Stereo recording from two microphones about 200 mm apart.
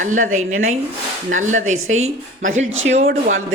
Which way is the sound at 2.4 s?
75° right (ahead or behind).